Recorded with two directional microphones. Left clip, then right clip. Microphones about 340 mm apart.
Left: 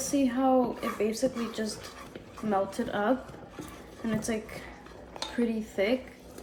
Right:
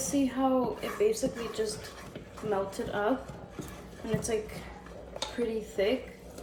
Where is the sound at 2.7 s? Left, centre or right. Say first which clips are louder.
Left 1 dB; left.